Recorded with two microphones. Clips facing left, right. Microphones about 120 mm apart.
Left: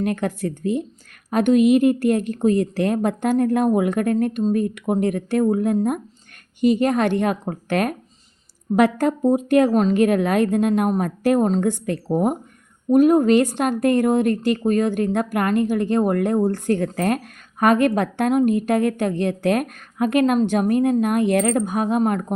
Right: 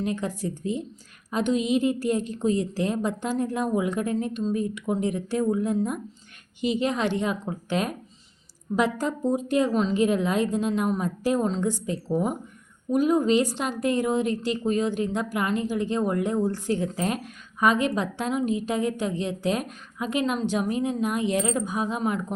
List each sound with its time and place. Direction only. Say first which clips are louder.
0.0 s a woman's voice: left 5 dB; 60° left (ahead or behind)